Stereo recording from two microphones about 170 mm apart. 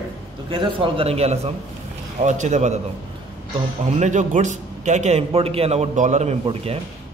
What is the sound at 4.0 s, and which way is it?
A man's voice, 45° right (ahead or behind).